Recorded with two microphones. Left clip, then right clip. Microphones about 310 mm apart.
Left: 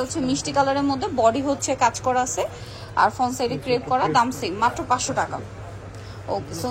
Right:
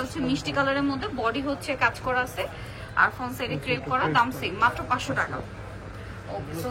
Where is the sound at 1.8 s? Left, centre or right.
Centre.